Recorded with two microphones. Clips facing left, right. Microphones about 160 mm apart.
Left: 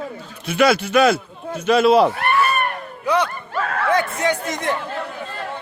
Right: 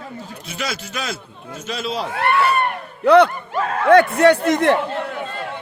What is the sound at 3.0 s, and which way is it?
A man's voice, 65° right (ahead or behind).